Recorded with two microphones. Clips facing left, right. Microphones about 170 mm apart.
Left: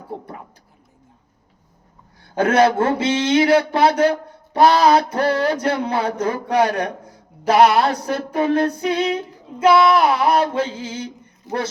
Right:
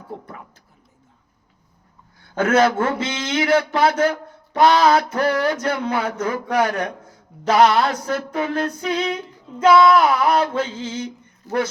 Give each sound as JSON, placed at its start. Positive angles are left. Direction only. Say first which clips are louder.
{"t": 2.4, "sound": "a man's voice", "louder": "left 2 dB", "side_deg": 30}